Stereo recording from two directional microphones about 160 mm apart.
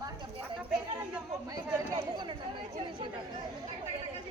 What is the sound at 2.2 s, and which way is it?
Chatter, 30° right (ahead or behind).